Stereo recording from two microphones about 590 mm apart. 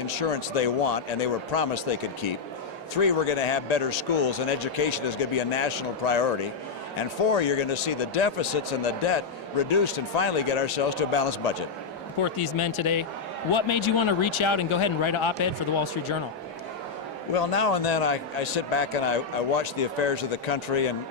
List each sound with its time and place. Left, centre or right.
0.1 s speech: left
3.0 s speech: left
7.3 s speech: left
12.2 s a man's voice: left
17.3 s speech: left